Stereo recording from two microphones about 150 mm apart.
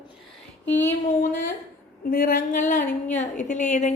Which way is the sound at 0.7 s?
15° left (ahead or behind).